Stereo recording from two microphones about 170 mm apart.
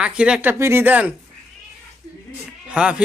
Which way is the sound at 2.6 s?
5° right (ahead or behind).